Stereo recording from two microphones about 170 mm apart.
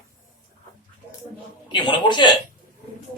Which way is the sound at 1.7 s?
25° left (ahead or behind).